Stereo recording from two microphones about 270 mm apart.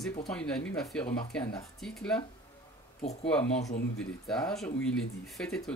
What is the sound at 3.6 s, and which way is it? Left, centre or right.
Speech, left.